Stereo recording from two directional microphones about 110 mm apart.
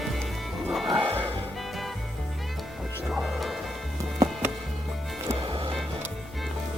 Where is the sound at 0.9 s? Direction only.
50° right (ahead or behind).